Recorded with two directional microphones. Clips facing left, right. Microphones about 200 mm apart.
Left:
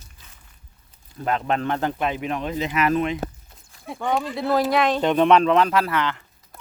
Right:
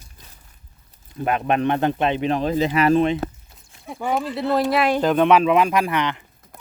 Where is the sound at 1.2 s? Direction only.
15° right (ahead or behind).